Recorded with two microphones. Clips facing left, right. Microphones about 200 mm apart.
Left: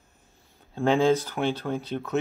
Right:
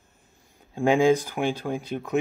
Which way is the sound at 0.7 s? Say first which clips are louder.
Right 2 dB; 10° right (ahead or behind).